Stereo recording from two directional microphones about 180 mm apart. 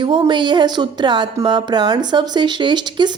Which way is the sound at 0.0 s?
25° right (ahead or behind).